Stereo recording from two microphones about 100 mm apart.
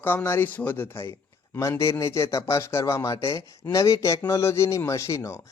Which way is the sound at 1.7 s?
30° left (ahead or behind).